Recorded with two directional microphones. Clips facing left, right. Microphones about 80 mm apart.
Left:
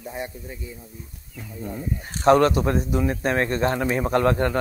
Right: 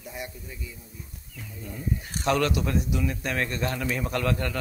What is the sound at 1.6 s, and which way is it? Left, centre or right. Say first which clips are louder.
A man's voice: left 3 dB; left.